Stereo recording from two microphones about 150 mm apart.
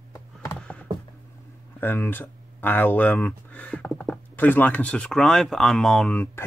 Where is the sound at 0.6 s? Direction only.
10° left (ahead or behind).